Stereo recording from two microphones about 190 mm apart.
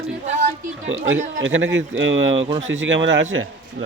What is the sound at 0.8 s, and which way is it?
Speech, 90° right.